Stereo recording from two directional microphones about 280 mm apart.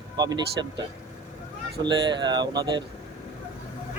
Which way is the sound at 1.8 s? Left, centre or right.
Centre.